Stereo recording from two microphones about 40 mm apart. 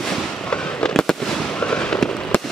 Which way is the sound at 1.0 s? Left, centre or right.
Centre.